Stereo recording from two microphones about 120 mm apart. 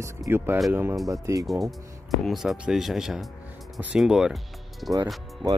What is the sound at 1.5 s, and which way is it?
Speech, centre (ahead or behind).